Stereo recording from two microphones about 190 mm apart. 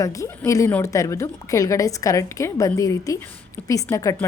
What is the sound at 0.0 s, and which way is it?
A woman's voice, 15° left (ahead or behind).